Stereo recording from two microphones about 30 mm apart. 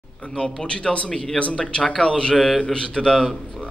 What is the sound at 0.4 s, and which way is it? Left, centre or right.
A man's voice, left.